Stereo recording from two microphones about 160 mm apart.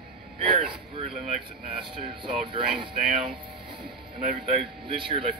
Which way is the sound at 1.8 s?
30° right (ahead or behind).